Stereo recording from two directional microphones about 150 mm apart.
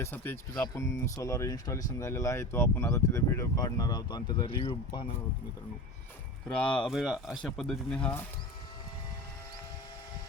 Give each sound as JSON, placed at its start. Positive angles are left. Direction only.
{"t": 0.0, "sound": "speech", "side_deg": 15}
{"t": 6.6, "sound": "speech", "side_deg": 5}